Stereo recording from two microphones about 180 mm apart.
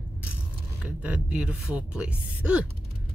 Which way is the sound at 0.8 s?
5° right (ahead or behind).